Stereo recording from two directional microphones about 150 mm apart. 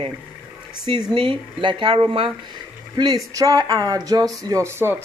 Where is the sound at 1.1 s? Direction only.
35° right (ahead or behind).